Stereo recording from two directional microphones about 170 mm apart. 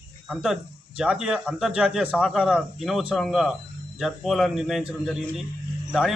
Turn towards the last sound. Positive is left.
turn(degrees=0)  # may be behind; listen again after turning